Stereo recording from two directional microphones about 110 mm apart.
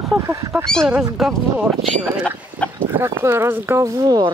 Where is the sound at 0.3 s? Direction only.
25° right (ahead or behind).